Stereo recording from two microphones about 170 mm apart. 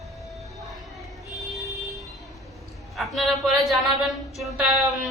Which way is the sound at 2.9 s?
Centre (ahead or behind).